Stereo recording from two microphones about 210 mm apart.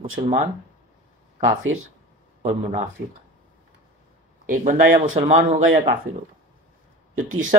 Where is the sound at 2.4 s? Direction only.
35° right (ahead or behind).